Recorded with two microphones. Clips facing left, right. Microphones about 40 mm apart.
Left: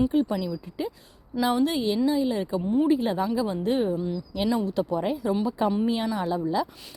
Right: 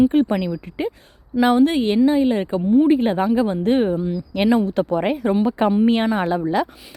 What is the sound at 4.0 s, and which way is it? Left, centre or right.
Speech, right.